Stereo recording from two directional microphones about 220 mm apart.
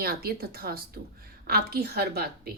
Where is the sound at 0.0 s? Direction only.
45° right (ahead or behind).